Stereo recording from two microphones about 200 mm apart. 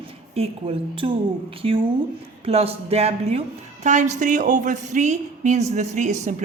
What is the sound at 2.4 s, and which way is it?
A man's voice, 30° right (ahead or behind).